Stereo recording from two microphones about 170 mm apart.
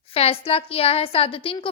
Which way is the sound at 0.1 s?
35° left (ahead or behind).